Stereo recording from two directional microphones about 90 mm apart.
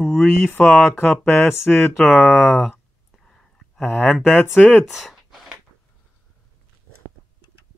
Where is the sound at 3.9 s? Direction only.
20° left (ahead or behind).